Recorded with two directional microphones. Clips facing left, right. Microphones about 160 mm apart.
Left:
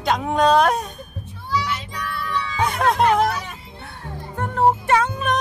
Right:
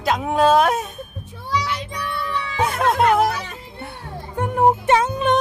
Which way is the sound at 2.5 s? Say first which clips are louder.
Right 1 dB; 5° right (ahead or behind).